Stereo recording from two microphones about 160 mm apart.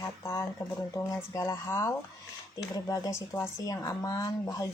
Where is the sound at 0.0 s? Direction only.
15° left (ahead or behind).